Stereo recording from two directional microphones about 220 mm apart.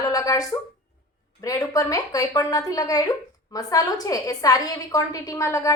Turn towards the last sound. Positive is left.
turn(degrees=15)  # may be behind; listen again after turning